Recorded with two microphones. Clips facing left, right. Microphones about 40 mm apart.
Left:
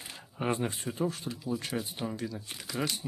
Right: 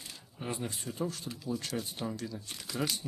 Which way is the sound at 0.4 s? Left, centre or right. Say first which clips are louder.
Left 7 dB; left.